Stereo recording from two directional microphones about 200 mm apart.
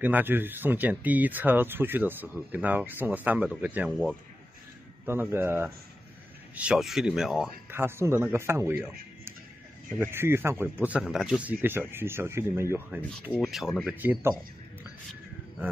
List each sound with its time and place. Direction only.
0.0 s speech: 10° right (ahead or behind)
9.9 s speech: 10° right (ahead or behind)
13.3 s speech: centre (ahead or behind)